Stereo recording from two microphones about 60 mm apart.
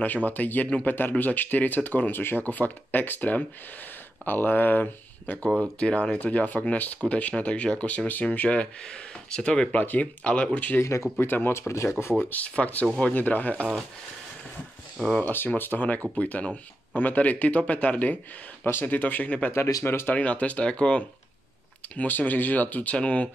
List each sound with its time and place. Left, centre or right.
0.0 s speech: left
5.8 s speech: centre
10.8 s speech: left
11.1 s speech: left
12.3 s speech: left
15.0 s speech: left
19.8 s speech: left
20.2 s speech: left
21.9 s speech: left